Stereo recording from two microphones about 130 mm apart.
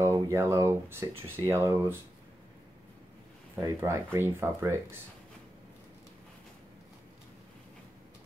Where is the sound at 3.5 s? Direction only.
20° right (ahead or behind).